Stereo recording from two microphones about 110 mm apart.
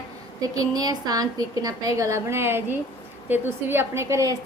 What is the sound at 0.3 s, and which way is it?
A woman's voice, 35° right (ahead or behind).